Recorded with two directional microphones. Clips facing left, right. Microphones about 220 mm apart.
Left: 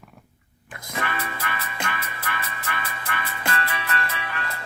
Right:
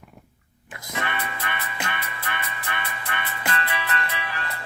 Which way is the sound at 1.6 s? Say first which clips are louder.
Even; 30° left (ahead or behind).